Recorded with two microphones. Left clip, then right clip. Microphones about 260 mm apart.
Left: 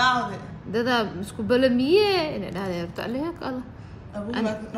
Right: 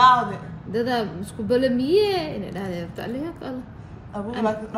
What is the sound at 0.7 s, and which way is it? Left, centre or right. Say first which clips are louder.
Speech: even; left.